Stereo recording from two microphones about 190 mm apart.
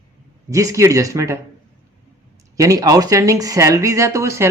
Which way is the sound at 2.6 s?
15° right (ahead or behind).